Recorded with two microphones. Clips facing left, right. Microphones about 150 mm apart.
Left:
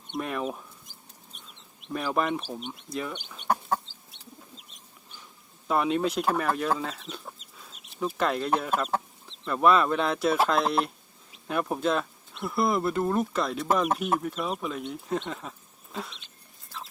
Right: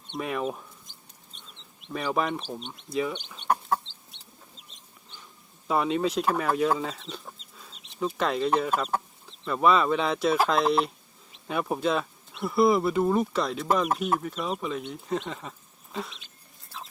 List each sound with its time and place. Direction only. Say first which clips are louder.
0.2 s speech: right 1 dB; centre (ahead or behind)
1.9 s speech: even; centre (ahead or behind)
5.1 s speech: right 1 dB; centre (ahead or behind)